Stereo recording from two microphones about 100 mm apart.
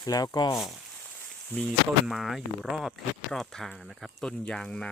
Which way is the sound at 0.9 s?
10° left (ahead or behind).